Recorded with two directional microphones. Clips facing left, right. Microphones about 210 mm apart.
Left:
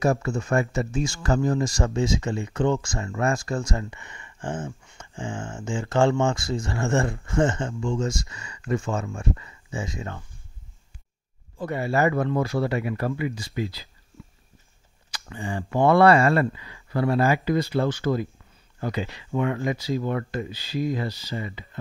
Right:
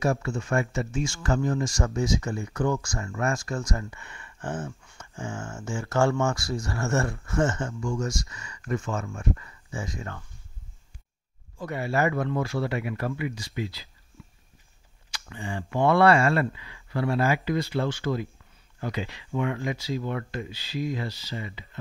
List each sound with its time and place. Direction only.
0.0 s speech: 40° left (ahead or behind); by 10.2 s 20° left (ahead or behind)
11.5 s speech: 30° left (ahead or behind)
15.2 s speech: 35° left (ahead or behind)